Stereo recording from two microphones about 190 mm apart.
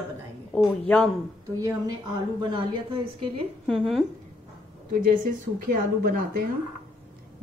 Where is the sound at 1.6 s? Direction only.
20° right (ahead or behind).